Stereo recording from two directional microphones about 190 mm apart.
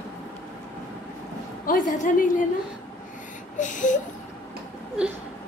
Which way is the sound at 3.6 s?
40° left (ahead or behind).